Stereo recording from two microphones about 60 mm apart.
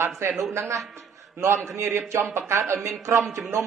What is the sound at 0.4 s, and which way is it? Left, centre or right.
A man's voice, right.